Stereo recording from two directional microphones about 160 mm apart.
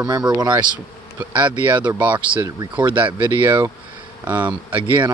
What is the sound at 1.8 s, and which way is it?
Speech, 10° right (ahead or behind).